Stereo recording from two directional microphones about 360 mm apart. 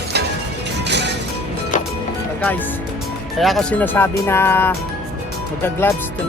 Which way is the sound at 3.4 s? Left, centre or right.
Centre.